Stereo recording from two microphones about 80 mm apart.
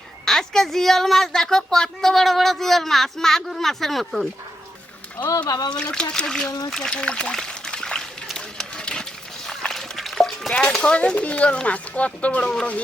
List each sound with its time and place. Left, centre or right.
0.3 s a woman's voice: centre
5.4 s speech: left
5.7 s speech: centre
6.7 s trickle: centre
9.5 s a sound: centre
10.8 s speech: centre